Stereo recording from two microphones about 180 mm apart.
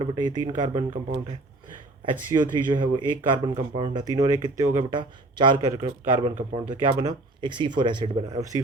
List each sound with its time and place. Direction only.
0.0 s speech: 25° right (ahead or behind)
2.3 s speech: 25° right (ahead or behind)
6.3 s speech: 35° right (ahead or behind); by 8.5 s 20° right (ahead or behind)